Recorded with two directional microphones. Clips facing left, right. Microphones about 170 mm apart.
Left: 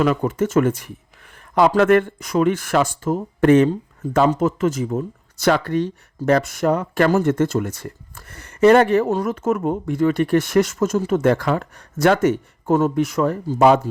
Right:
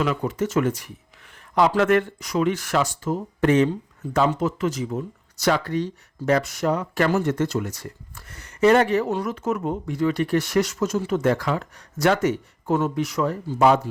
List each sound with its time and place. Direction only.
0.0 s speech: 50° left (ahead or behind)